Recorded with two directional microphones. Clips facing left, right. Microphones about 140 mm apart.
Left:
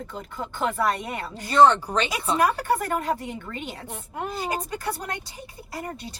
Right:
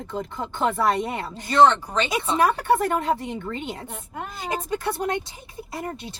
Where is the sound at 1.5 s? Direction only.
10° left (ahead or behind).